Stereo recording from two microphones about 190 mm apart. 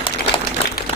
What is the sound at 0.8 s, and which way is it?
Applause, 50° left (ahead or behind).